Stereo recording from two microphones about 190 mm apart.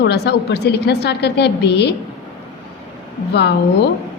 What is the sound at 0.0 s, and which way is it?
A woman's voice, 60° left (ahead or behind).